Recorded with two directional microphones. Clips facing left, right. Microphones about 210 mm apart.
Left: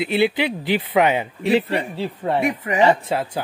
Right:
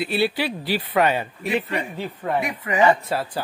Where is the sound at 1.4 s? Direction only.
30° left (ahead or behind).